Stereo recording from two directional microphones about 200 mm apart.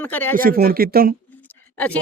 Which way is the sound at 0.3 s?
45° right (ahead or behind).